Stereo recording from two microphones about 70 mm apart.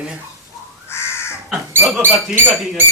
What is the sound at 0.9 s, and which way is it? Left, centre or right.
Crow, left.